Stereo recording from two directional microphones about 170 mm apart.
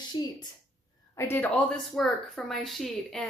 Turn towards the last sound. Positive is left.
turn(degrees=5)  # may be behind; listen again after turning